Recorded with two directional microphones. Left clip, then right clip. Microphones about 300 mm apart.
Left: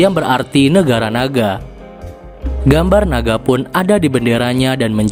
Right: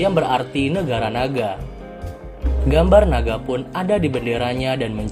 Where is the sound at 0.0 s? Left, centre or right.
Left.